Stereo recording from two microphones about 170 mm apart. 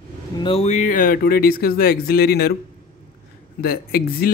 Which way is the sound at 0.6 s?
45° left (ahead or behind).